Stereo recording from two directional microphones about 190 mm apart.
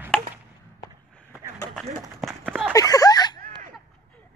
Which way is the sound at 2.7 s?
20° left (ahead or behind).